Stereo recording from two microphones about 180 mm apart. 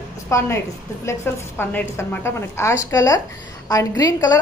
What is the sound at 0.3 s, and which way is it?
A woman's voice, 15° left (ahead or behind).